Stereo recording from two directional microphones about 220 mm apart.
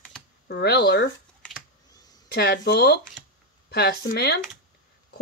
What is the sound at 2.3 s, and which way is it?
Speech, 45° left (ahead or behind).